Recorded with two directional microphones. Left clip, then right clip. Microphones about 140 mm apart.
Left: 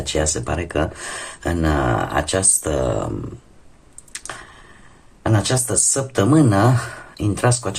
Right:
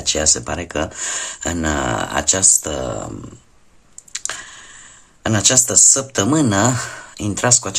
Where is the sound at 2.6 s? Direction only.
10° right (ahead or behind).